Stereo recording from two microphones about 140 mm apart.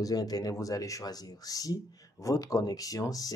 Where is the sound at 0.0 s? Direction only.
25° left (ahead or behind).